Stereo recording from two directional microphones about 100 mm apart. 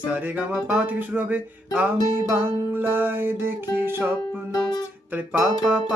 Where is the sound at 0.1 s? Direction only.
15° right (ahead or behind).